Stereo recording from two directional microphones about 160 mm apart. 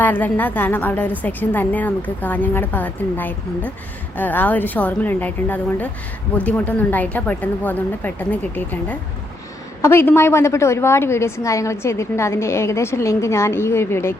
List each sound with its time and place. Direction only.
0.0 s a woman's voice: 10° left (ahead or behind)